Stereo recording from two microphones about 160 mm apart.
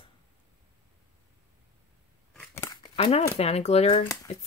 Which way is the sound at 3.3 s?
40° left (ahead or behind).